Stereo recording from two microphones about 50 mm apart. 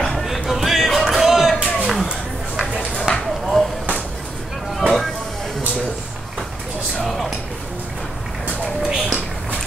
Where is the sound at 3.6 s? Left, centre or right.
Centre.